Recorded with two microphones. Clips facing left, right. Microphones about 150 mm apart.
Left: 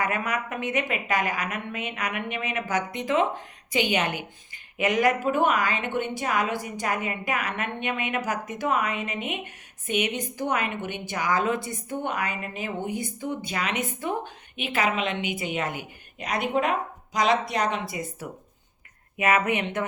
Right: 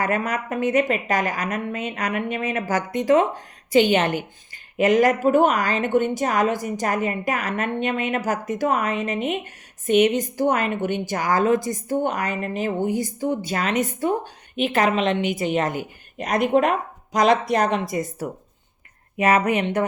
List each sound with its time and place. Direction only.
0.0 s a woman's voice: 40° right (ahead or behind)